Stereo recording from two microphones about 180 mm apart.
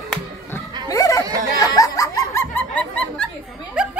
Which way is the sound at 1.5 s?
20° left (ahead or behind).